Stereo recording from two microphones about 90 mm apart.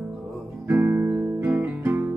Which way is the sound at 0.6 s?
20° right (ahead or behind).